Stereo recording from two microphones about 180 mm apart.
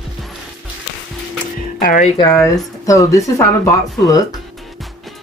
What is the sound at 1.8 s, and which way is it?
Speech, 55° left (ahead or behind).